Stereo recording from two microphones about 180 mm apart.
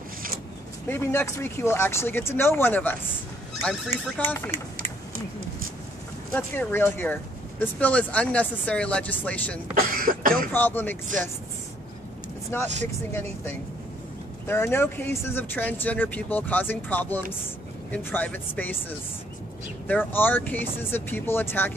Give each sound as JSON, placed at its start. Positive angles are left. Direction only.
{"t": 0.8, "sound": "speech", "side_deg": 10}
{"t": 4.5, "sound": "typing", "side_deg": -40}
{"t": 6.3, "sound": "speech", "side_deg": 10}
{"t": 9.8, "sound": "cough", "side_deg": -50}
{"t": 10.5, "sound": "speech", "side_deg": 10}
{"t": 12.5, "sound": "speech", "side_deg": 15}